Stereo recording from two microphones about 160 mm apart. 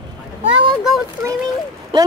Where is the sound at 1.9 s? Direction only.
30° right (ahead or behind).